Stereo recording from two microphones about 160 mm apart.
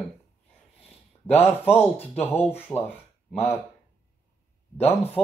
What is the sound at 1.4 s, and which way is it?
Speech, 15° left (ahead or behind).